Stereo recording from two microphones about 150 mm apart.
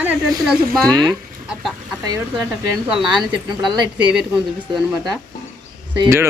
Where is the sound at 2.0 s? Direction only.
25° right (ahead or behind).